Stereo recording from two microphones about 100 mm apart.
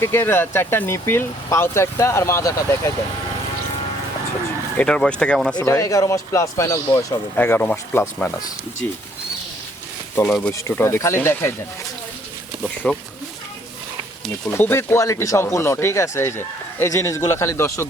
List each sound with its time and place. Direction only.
0.0 s speech: 25° left (ahead or behind)
4.8 s speech: 10° left (ahead or behind)
5.6 s speech: 30° left (ahead or behind)
7.4 s speech: 15° left (ahead or behind)
10.6 s speech: 25° left (ahead or behind)
12.6 s speech: 10° left (ahead or behind)
14.5 s speech: 25° left (ahead or behind)